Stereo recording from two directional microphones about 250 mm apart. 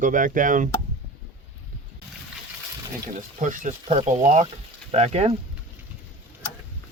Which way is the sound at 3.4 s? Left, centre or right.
Right.